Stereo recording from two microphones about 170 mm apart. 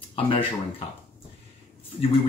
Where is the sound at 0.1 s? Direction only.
35° left (ahead or behind).